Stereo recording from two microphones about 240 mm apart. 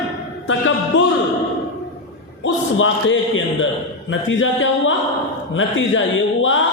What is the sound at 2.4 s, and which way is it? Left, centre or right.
A man's voice, left.